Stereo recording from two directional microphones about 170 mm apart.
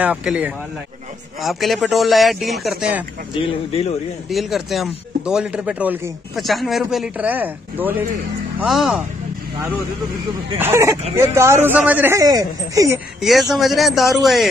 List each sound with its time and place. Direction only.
0.0 s speech: 5° right (ahead or behind)
3.3 s speech: 35° left (ahead or behind)
4.3 s speech: centre (ahead or behind)
10.6 s speech: 15° right (ahead or behind)
13.2 s speech: centre (ahead or behind)